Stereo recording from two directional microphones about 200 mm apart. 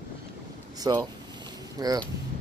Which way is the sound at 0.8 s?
15° right (ahead or behind).